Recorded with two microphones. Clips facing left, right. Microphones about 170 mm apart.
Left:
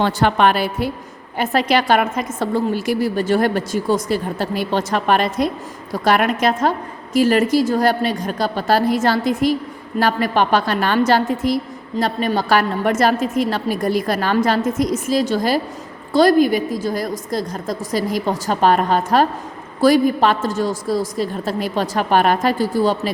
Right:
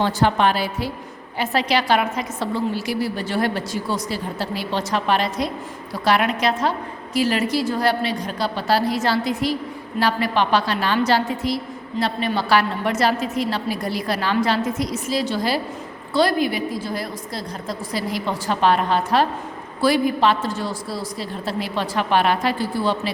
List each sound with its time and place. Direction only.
0.0 s a woman's voice: 65° left (ahead or behind); by 23.1 s 40° left (ahead or behind)